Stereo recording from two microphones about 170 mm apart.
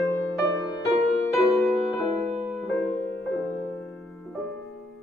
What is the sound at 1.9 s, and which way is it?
Music, centre (ahead or behind).